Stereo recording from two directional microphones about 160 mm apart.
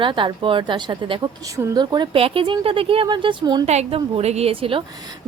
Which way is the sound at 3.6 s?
40° right (ahead or behind).